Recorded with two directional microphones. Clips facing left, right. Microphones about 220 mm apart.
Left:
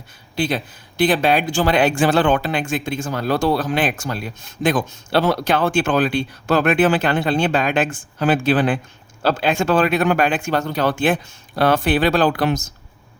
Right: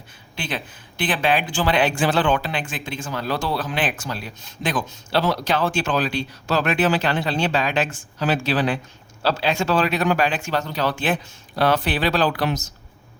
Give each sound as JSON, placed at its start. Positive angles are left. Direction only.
{"t": 0.3, "sound": "a man's voice", "side_deg": 40}